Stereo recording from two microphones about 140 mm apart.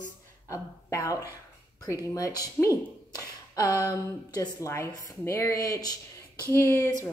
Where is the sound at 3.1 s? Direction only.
25° left (ahead or behind).